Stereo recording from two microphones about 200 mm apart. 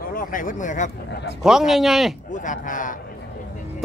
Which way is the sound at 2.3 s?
40° left (ahead or behind).